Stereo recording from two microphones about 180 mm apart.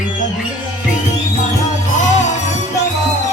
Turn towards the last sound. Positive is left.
turn(degrees=40)  # may be behind; listen again after turning